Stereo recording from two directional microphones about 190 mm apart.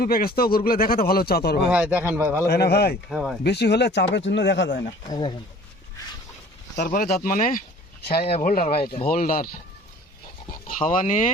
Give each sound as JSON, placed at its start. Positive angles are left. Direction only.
{"t": 0.0, "sound": "speech", "side_deg": 50}
{"t": 1.7, "sound": "speech", "side_deg": -10}
{"t": 2.5, "sound": "speech", "side_deg": 60}
{"t": 3.1, "sound": "speech", "side_deg": 0}
{"t": 3.4, "sound": "speech", "side_deg": 60}
{"t": 5.0, "sound": "speech", "side_deg": 20}
{"t": 6.7, "sound": "speech", "side_deg": 50}
{"t": 8.2, "sound": "speech", "side_deg": 35}
{"t": 8.4, "sound": "speech", "side_deg": 45}
{"t": 8.7, "sound": "speech", "side_deg": 30}
{"t": 9.0, "sound": "speech", "side_deg": 50}
{"t": 10.8, "sound": "speech", "side_deg": 40}